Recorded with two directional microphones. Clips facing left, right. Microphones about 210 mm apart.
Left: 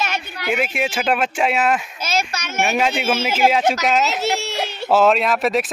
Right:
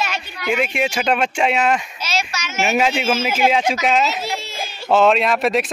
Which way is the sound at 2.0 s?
55° left (ahead or behind).